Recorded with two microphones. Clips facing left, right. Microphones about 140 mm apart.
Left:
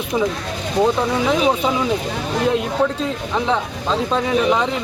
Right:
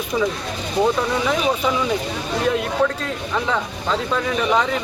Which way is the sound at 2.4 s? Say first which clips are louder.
Left 1 dB; 20° left (ahead or behind).